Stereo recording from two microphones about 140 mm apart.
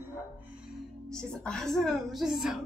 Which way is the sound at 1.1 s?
5° left (ahead or behind).